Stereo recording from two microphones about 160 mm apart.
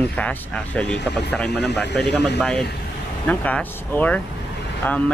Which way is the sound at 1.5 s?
90° left.